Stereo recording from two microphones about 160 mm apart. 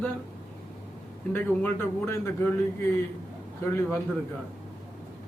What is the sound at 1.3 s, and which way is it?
Speech, 10° left (ahead or behind).